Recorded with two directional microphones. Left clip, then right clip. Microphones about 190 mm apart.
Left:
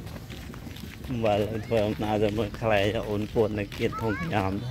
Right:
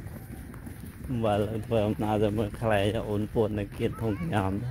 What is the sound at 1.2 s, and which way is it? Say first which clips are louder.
Speech: left 2 dB; 20° right (ahead or behind).